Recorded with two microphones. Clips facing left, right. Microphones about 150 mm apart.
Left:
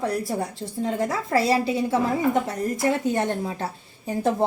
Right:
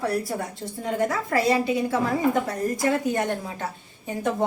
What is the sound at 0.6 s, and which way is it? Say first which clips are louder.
A woman's voice: even; 30° left (ahead or behind).